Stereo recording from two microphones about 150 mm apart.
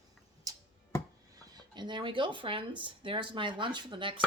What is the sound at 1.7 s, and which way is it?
A woman's voice, 30° right (ahead or behind).